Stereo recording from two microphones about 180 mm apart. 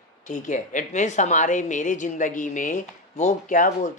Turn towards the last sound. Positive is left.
turn(degrees=45)  # may be behind; listen again after turning